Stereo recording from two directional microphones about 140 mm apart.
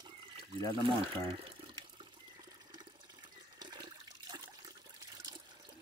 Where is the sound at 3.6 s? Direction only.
30° right (ahead or behind).